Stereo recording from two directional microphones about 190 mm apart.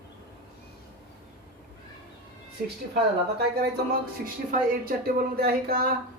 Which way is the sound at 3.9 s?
50° right (ahead or behind).